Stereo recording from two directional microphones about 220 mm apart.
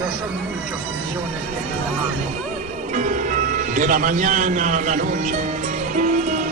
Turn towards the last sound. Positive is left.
turn(degrees=-35)  # may be behind; listen again after turning